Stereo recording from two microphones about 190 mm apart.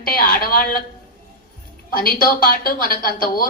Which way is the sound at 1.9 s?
50° left (ahead or behind).